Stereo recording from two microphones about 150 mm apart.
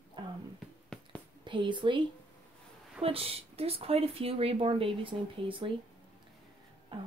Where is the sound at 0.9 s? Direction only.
5° left (ahead or behind).